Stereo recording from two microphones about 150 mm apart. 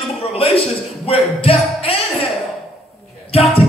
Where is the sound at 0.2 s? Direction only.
40° left (ahead or behind).